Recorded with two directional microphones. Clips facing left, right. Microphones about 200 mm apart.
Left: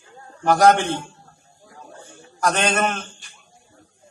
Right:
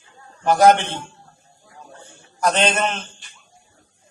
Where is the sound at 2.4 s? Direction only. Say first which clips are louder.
Right 1 dB; 20° right (ahead or behind).